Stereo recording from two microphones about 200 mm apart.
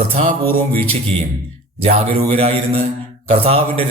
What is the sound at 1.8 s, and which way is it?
A man's voice, 30° right (ahead or behind).